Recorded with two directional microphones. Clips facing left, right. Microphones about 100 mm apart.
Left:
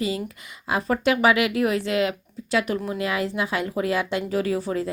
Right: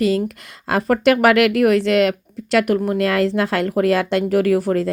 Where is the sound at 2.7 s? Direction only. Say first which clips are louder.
Right 8 dB; 55° right (ahead or behind).